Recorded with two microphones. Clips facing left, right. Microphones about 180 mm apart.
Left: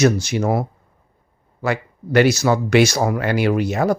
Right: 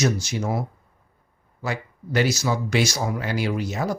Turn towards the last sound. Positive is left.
turn(degrees=65)  # may be behind; listen again after turning